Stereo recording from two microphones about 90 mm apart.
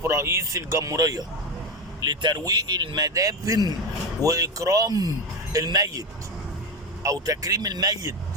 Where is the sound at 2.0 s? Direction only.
50° right (ahead or behind).